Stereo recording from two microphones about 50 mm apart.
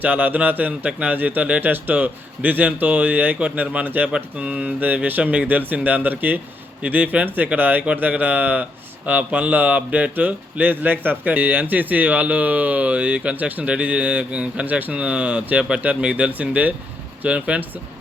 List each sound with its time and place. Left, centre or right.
0.0 s speech: right